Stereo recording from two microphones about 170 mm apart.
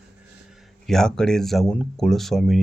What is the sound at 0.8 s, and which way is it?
Speech, 5° left (ahead or behind).